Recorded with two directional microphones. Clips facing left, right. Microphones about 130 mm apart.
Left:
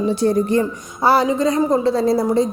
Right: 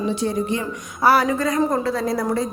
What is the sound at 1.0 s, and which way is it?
A woman's voice, 25° left (ahead or behind).